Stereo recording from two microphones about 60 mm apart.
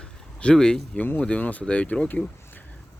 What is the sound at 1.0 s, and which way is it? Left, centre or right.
Speech, left.